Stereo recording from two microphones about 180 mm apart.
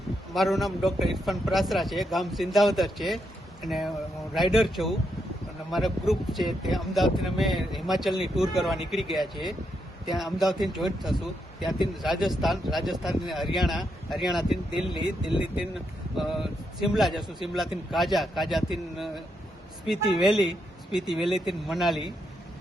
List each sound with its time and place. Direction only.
0.3 s speech: centre (ahead or behind)
12.2 s speech: centre (ahead or behind)
14.9 s speech: 30° left (ahead or behind)
15.5 s speech: centre (ahead or behind)